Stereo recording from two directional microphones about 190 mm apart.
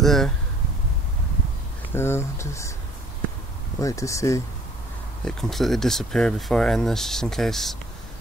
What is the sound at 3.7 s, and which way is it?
Speech, 15° left (ahead or behind).